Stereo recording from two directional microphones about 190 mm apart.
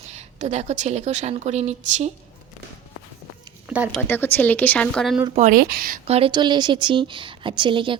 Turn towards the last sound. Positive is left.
turn(degrees=-25)  # may be behind; listen again after turning